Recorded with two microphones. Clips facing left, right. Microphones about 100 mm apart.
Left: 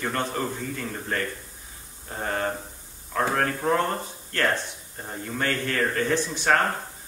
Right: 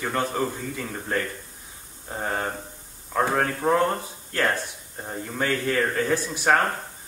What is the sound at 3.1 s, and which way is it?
Speech, 10° right (ahead or behind).